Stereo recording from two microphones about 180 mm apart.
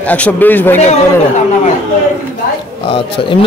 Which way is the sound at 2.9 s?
30° left (ahead or behind).